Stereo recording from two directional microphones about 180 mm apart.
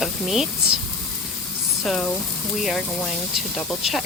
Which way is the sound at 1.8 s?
5° left (ahead or behind).